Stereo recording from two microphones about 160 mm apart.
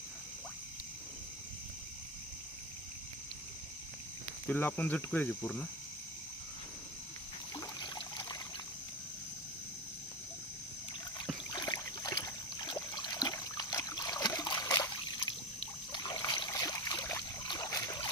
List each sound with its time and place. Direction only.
4.4 s cricket: 10° left (ahead or behind)
7.5 s trickle: 25° left (ahead or behind)
11.5 s a sound: 25° left (ahead or behind)
15.6 s trickle: 30° left (ahead or behind)